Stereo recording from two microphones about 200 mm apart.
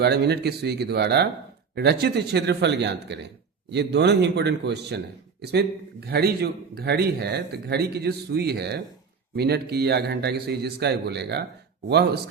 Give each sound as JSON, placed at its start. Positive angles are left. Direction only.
{"t": 0.0, "sound": "a man's voice", "side_deg": -55}